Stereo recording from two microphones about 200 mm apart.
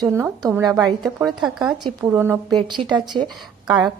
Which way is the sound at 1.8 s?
15° right (ahead or behind).